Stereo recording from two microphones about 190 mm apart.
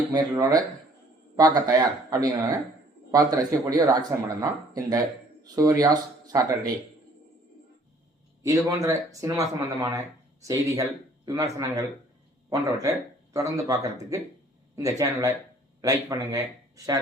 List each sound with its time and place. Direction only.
0.1 s speech: 20° right (ahead or behind)
8.4 s a man's voice: 15° right (ahead or behind)